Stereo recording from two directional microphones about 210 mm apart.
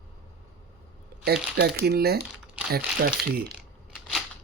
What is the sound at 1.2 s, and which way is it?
Speech, 50° right (ahead or behind).